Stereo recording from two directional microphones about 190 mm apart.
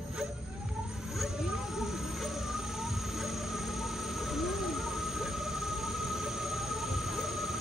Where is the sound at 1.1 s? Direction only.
Centre (ahead or behind).